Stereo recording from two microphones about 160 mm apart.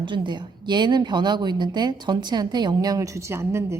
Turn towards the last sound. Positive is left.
turn(degrees=-15)  # may be behind; listen again after turning